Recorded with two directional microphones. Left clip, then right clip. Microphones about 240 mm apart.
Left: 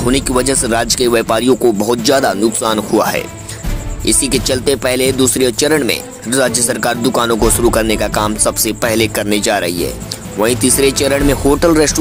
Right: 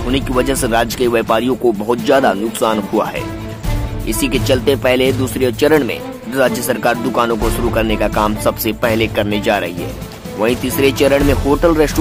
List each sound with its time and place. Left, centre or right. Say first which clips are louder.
0.1 s speech: even; centre